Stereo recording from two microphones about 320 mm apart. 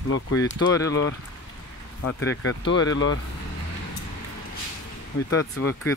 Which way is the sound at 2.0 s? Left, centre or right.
Left.